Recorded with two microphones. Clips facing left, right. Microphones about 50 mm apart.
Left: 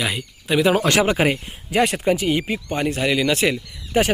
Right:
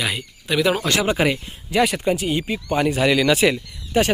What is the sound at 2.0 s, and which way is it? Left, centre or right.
Speech, left.